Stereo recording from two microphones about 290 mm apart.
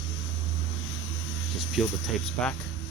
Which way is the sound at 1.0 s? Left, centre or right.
Left.